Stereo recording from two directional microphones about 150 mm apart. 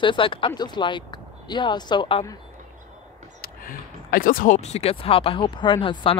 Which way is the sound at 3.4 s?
70° left (ahead or behind).